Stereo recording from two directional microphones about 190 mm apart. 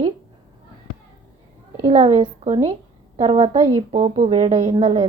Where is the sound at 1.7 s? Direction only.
35° right (ahead or behind).